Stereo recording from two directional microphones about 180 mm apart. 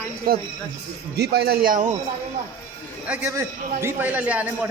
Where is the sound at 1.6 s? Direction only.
50° right (ahead or behind).